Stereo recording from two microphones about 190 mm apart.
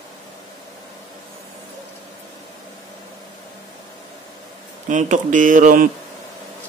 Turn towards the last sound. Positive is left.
turn(degrees=-45)  # may be behind; listen again after turning